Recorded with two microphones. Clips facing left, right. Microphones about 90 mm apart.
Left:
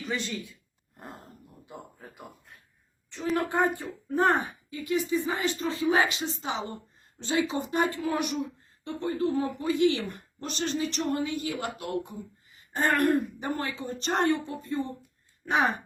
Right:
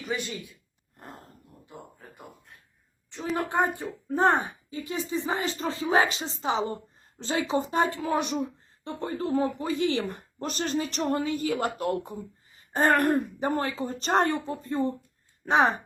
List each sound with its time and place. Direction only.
0.0 s speech: 15° right (ahead or behind)
3.3 s a woman's voice: 20° right (ahead or behind); by 15.7 s 35° right (ahead or behind)